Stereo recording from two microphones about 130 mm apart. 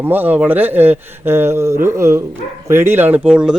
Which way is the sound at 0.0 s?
15° right (ahead or behind).